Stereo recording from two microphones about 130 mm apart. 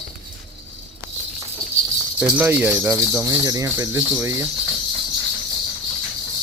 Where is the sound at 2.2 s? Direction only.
15° right (ahead or behind).